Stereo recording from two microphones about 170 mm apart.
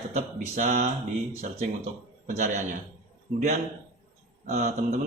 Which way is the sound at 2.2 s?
45° right (ahead or behind).